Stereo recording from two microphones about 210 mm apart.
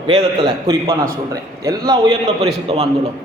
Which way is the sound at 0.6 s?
15° right (ahead or behind).